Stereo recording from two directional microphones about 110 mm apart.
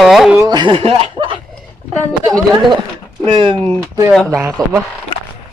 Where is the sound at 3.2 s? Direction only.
50° right (ahead or behind).